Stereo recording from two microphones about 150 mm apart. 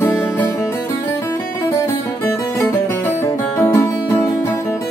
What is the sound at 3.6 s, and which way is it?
Music, 20° left (ahead or behind).